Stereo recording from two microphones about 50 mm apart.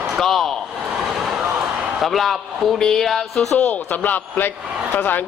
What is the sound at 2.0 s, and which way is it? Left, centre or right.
Speech, centre.